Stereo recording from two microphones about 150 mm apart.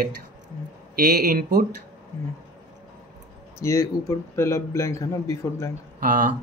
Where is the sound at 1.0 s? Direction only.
90° right.